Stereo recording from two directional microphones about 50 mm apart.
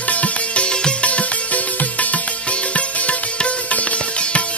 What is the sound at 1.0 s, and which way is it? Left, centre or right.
Music, left.